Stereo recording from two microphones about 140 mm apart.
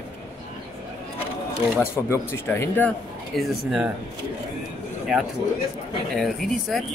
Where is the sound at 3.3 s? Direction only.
Centre (ahead or behind).